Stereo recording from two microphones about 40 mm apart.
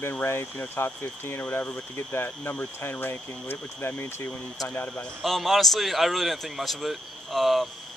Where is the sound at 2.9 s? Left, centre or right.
Left.